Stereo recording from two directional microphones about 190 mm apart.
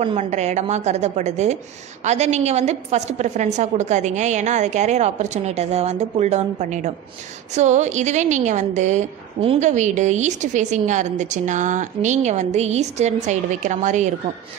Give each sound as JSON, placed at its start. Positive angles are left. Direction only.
{"t": 0.0, "sound": "a woman's voice", "side_deg": -35}